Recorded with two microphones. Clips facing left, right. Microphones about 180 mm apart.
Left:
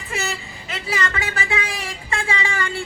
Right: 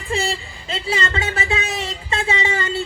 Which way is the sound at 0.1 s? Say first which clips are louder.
Right 5 dB; 30° right (ahead or behind).